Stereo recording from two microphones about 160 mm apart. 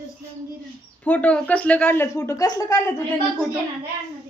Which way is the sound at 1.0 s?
10° left (ahead or behind).